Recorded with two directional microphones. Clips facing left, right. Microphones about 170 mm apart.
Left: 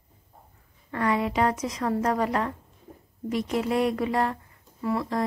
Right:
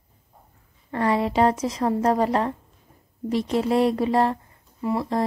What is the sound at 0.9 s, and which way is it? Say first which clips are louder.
A woman's voice: right 3 dB; 30° right (ahead or behind).